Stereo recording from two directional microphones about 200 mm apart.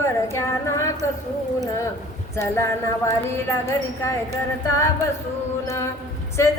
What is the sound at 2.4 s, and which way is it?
Speech, 15° left (ahead or behind).